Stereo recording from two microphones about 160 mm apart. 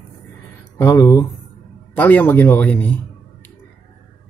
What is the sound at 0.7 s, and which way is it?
Speech, 20° left (ahead or behind).